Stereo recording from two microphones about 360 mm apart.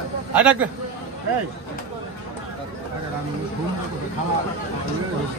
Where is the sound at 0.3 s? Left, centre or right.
Centre.